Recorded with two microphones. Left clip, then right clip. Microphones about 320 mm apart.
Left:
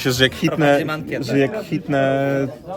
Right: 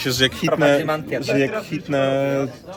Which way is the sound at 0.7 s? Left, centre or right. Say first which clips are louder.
Right 1 dB; centre.